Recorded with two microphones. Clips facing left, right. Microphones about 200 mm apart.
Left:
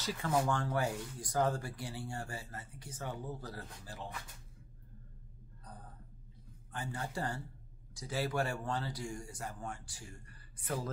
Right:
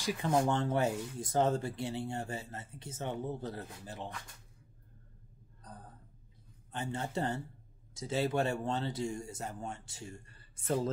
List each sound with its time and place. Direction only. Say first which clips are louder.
0.0 s speech: right 3 dB; 15° right (ahead or behind)
6.7 s speech: right 4 dB; 25° right (ahead or behind)